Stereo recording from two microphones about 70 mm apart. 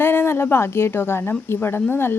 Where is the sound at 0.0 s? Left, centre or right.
Left.